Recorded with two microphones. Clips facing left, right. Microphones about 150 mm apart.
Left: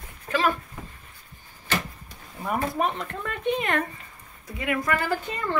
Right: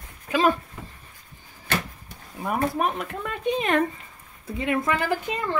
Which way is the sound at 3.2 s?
15° right (ahead or behind).